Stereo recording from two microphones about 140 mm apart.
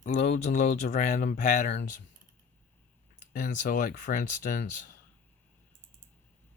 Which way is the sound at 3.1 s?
65° left (ahead or behind).